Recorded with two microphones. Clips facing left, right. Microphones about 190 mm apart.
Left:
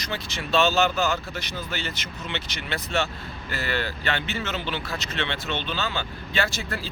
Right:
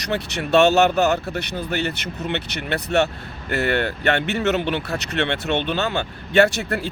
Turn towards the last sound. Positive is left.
turn(degrees=-65)  # may be behind; listen again after turning